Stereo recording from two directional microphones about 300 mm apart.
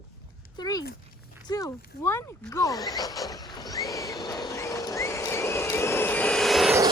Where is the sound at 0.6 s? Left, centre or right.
Centre.